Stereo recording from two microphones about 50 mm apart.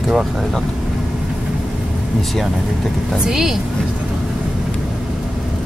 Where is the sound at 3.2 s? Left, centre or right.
Centre.